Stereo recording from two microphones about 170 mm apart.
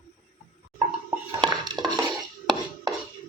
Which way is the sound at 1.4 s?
25° right (ahead or behind).